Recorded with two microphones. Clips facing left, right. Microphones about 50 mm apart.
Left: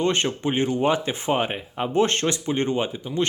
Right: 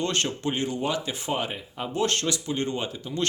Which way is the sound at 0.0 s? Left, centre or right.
Left.